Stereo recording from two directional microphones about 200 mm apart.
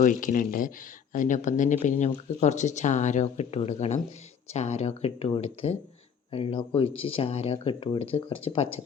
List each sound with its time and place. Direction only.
0.0 s speech: 40° left (ahead or behind)